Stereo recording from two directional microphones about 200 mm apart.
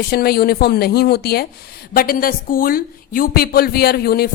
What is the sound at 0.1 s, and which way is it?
Speech, 50° left (ahead or behind).